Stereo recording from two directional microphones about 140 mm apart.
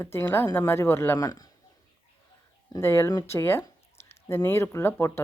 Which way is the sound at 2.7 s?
15° left (ahead or behind).